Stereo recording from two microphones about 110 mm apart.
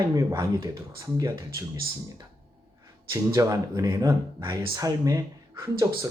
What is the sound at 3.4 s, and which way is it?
Speech, 35° right (ahead or behind).